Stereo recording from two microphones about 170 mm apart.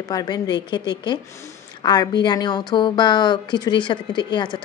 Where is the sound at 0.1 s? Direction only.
25° left (ahead or behind).